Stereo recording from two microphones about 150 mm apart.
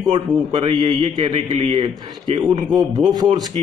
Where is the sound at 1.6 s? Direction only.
45° right (ahead or behind).